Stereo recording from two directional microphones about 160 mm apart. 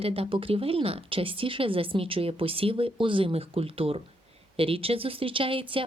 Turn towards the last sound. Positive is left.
turn(degrees=-35)  # may be behind; listen again after turning